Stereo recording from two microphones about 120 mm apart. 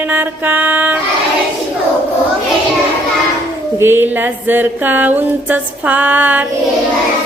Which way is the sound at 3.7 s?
20° right (ahead or behind).